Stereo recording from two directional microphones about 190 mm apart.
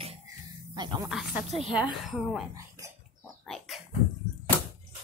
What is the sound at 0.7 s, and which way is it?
Speech, 25° right (ahead or behind).